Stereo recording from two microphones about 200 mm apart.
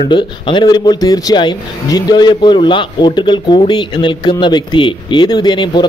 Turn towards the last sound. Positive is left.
turn(degrees=20)  # may be behind; listen again after turning